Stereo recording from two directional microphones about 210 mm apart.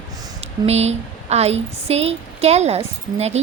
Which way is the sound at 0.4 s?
30° right (ahead or behind).